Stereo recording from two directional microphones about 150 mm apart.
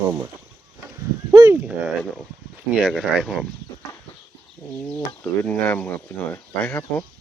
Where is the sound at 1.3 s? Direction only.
20° right (ahead or behind).